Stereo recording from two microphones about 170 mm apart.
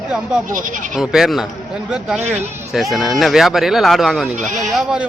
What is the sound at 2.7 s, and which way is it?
Speech, centre (ahead or behind).